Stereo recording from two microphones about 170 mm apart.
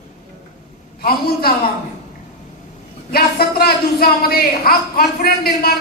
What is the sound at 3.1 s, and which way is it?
Speech, 65° left (ahead or behind).